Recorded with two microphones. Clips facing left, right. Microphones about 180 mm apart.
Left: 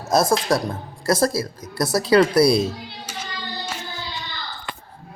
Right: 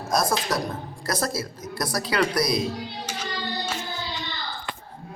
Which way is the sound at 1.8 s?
30° left (ahead or behind).